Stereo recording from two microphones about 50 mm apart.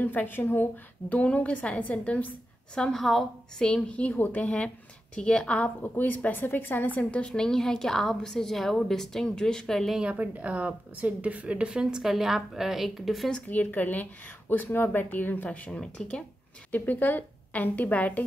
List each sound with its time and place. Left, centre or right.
0.0 s a woman's voice: left
1.1 s a woman's voice: left
2.7 s a woman's voice: centre
3.0 s a woman's voice: centre
3.9 s a woman's voice: left
5.9 s a woman's voice: left
7.1 s a woman's voice: left
7.3 s a woman's voice: centre
10.1 s a woman's voice: right; by 13.3 s centre
13.5 s a woman's voice: left
15.8 s a woman's voice: centre
16.7 s a woman's voice: left